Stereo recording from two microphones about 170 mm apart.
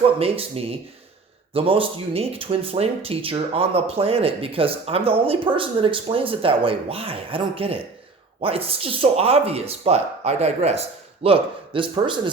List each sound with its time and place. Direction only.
0.0 s speech: 35° right (ahead or behind)